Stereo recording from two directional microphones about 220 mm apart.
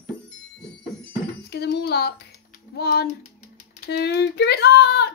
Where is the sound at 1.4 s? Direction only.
50° left (ahead or behind).